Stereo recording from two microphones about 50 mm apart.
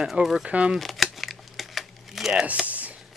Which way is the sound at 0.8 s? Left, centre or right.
Centre.